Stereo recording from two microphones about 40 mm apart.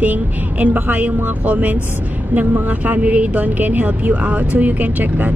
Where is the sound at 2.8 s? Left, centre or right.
Right.